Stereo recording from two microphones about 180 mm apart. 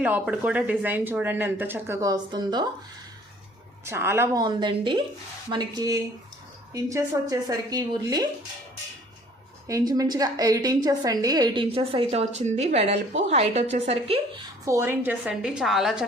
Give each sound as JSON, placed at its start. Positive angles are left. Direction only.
{"t": 0.0, "sound": "speech", "side_deg": -5}
{"t": 3.8, "sound": "speech", "side_deg": -15}
{"t": 9.6, "sound": "a woman's voice", "side_deg": -20}
{"t": 14.6, "sound": "a woman's voice", "side_deg": -15}